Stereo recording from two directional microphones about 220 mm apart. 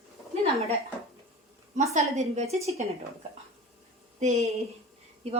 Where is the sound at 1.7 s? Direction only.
30° right (ahead or behind).